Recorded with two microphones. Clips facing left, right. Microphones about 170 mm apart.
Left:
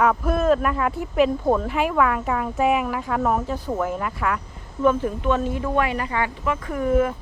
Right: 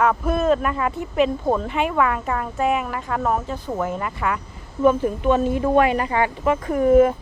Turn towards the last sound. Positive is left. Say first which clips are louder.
# right 6 dB
turn(degrees=-20)  # may be behind; listen again after turning